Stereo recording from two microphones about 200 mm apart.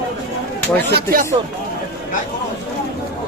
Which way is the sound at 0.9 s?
45° right (ahead or behind).